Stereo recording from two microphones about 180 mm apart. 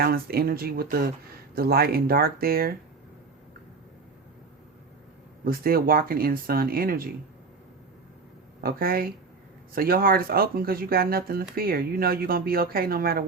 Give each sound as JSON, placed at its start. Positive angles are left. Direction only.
{"t": 0.0, "sound": "speech", "side_deg": -55}
{"t": 5.5, "sound": "speech", "side_deg": -55}
{"t": 8.6, "sound": "speech", "side_deg": -55}